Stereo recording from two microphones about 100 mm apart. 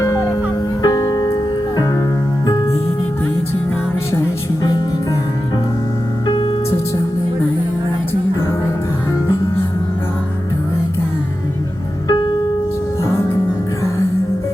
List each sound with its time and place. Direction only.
0.8 s music: 40° left (ahead or behind)
6.2 s music: 50° left (ahead or behind)
12.0 s piano: 45° left (ahead or behind)